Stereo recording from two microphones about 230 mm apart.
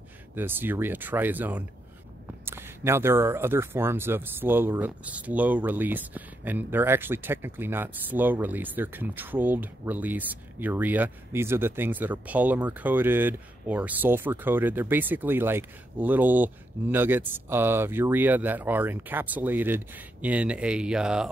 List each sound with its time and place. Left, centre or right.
0.4 s speech: centre